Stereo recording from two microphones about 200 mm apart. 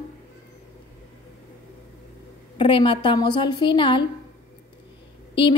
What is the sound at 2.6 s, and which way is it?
A woman's voice, 25° left (ahead or behind).